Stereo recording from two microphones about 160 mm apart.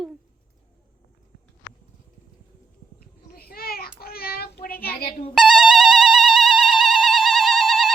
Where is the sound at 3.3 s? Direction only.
70° left (ahead or behind).